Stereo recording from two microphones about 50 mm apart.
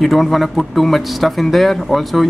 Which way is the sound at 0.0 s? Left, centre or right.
Centre.